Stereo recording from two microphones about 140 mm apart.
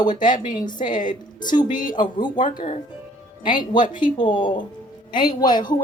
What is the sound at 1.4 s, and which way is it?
A woman's voice, 30° left (ahead or behind).